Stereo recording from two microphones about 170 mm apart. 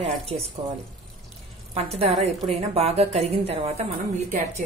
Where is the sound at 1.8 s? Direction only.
35° right (ahead or behind).